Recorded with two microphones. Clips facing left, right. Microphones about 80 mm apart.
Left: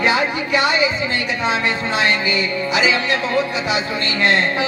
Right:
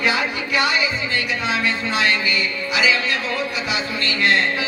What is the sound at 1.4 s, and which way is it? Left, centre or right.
Music, left.